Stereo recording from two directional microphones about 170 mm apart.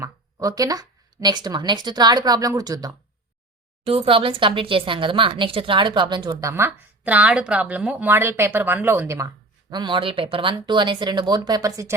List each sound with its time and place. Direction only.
0.0 s speech: 20° right (ahead or behind)
3.8 s speech: 35° right (ahead or behind)